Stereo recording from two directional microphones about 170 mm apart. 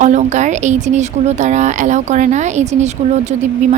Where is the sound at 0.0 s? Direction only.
45° right (ahead or behind).